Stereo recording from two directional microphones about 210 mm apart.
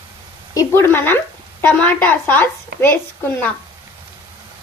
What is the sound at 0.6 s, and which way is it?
A woman's voice, 10° left (ahead or behind).